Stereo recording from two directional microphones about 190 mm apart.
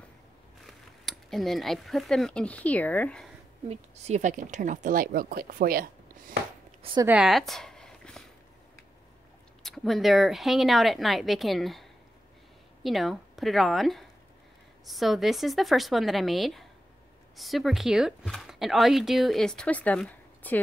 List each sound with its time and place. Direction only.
0.7 s speech: centre (ahead or behind)
3.6 s speech: 35° right (ahead or behind)
6.8 s speech: 25° right (ahead or behind)
7.1 s a sound: 5° right (ahead or behind)
9.6 s speech: centre (ahead or behind)